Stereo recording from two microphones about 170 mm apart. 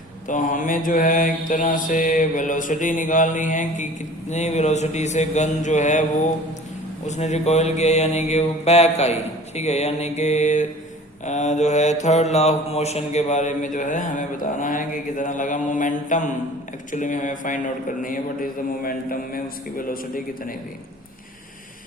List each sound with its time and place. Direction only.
0.3 s mantra: 50° left (ahead or behind)
7.1 s mantra: 40° left (ahead or behind)